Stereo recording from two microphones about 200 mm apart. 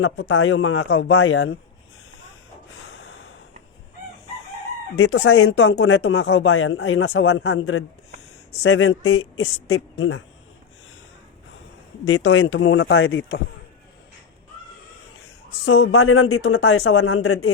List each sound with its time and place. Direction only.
0.0 s speech: 90° left
2.8 s snort: 85° left
4.9 s speech: 75° left (ahead or behind)
8.6 s speech: 90° left
12.0 s speech: 90° left
15.6 s speech: 90° left